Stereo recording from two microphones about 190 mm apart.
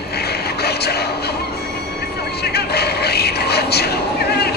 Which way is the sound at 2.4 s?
55° left (ahead or behind).